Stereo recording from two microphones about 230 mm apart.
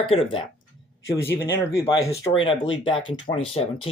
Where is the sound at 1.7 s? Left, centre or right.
Centre.